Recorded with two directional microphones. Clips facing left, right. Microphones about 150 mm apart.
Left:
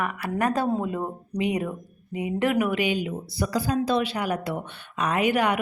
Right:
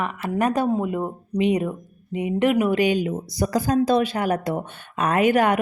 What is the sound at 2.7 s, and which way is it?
Speech, 45° right (ahead or behind).